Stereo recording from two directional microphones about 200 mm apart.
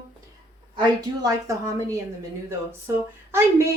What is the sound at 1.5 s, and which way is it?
Speech, 15° right (ahead or behind).